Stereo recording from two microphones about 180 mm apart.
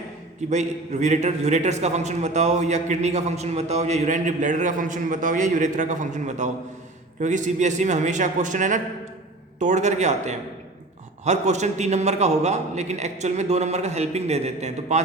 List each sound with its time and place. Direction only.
0.5 s a man's voice: 40° right (ahead or behind)